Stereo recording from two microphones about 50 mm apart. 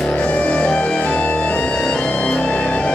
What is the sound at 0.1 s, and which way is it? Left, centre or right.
Music, left.